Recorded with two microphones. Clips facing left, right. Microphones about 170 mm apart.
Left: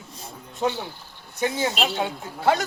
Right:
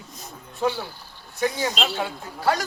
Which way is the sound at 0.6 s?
15° left (ahead or behind).